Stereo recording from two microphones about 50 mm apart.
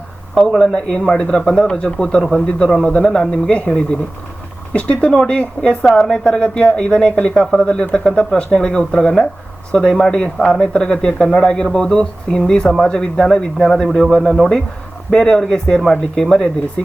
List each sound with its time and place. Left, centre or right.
0.6 s speech: centre
4.7 s speech: left